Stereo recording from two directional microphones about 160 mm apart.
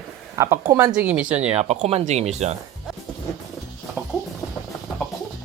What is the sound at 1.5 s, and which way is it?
Speech, 45° right (ahead or behind).